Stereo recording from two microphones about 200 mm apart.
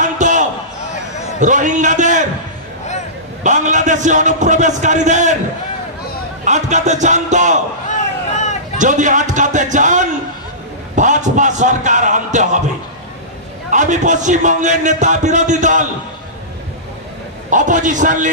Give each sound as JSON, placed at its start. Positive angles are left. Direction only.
{"t": 0.0, "sound": "a sound", "side_deg": -40}
{"t": 1.4, "sound": "a man's voice", "side_deg": -40}
{"t": 3.4, "sound": "a man's voice", "side_deg": -40}
{"t": 6.4, "sound": "a man's voice", "side_deg": -35}
{"t": 8.7, "sound": "a man's voice", "side_deg": -40}
{"t": 13.7, "sound": "a man's voice", "side_deg": -40}
{"t": 17.5, "sound": "a man's voice", "side_deg": -40}